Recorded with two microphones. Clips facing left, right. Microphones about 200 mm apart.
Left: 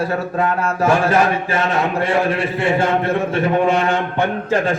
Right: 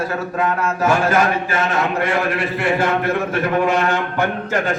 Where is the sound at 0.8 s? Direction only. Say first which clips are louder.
Left 1 dB; 30° left (ahead or behind).